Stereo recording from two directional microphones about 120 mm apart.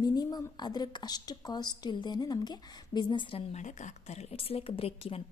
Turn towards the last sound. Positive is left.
turn(degrees=55)  # may be behind; listen again after turning